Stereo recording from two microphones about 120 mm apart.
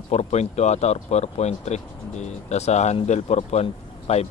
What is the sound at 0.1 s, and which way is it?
Speech, 65° left (ahead or behind).